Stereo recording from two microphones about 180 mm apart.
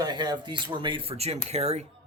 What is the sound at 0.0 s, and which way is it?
Speech, 25° right (ahead or behind).